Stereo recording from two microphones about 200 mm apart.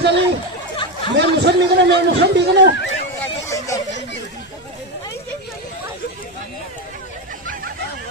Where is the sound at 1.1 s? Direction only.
60° right (ahead or behind).